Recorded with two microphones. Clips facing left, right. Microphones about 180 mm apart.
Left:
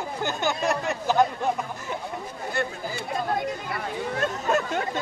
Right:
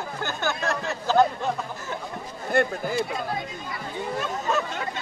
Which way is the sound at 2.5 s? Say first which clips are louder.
Right 7 dB; 55° right (ahead or behind).